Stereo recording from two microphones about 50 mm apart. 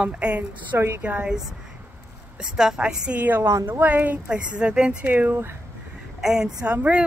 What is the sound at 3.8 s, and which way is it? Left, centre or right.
Speech, right.